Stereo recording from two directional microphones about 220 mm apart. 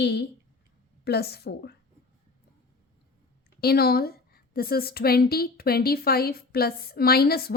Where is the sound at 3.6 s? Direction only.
45° left (ahead or behind).